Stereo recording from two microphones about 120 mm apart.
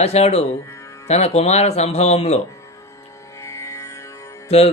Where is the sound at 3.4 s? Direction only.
25° left (ahead or behind).